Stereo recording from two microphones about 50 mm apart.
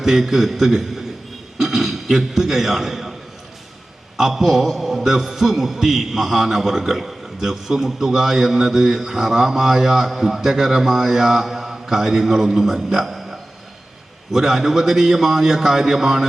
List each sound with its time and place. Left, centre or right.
0.0 s a man's voice: centre
4.2 s a man's voice: centre